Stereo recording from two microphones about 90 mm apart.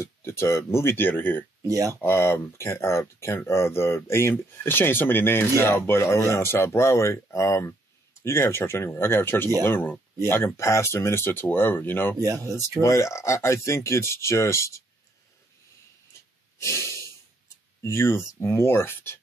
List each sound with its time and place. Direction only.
0.0 s speech: 30° left (ahead or behind)
1.7 s speech: 40° right (ahead or behind)
2.0 s speech: 25° left (ahead or behind)
12.2 s speech: 40° right (ahead or behind)
12.8 s speech: 35° left (ahead or behind)
16.1 s snort: 30° left (ahead or behind)
17.8 s speech: 30° left (ahead or behind)